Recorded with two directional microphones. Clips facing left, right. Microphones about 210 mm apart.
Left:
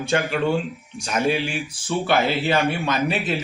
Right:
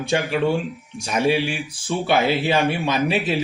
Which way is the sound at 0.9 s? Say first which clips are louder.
Right 2 dB; centre (ahead or behind).